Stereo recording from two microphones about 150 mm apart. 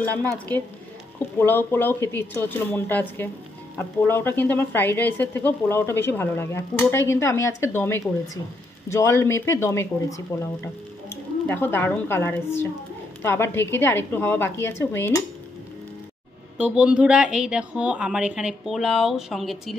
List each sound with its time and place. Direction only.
0.1 s a woman's voice: 20° right (ahead or behind)
1.4 s speech: 15° left (ahead or behind)
16.5 s speech: 10° right (ahead or behind)